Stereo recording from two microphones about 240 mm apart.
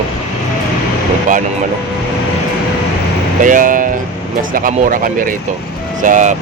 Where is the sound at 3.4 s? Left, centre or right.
Right.